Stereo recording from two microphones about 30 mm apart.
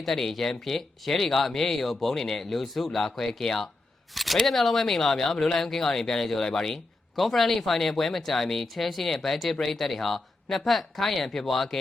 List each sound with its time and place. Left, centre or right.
0.0 s speech: centre
4.1 s speech: centre